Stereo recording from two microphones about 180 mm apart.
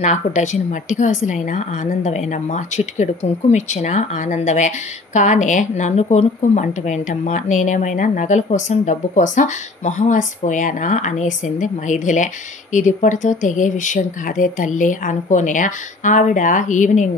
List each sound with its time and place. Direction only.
0.0 s a woman's voice: 40° left (ahead or behind)